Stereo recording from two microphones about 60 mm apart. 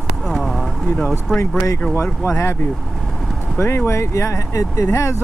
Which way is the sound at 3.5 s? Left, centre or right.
Left.